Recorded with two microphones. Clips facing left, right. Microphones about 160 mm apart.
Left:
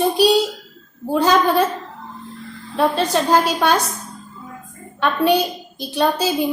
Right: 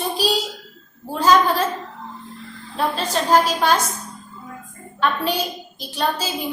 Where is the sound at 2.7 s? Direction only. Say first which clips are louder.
Left 5 dB; 65° left (ahead or behind).